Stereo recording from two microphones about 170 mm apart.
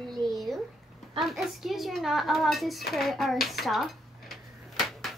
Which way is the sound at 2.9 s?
Centre (ahead or behind).